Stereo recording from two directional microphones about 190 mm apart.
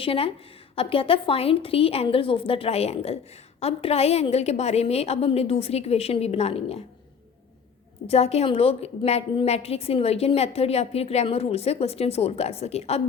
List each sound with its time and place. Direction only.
0.0 s a woman's voice: 30° left (ahead or behind)
8.0 s a woman's voice: 35° left (ahead or behind)